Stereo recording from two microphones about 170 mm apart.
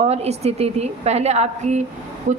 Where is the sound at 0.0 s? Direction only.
40° right (ahead or behind).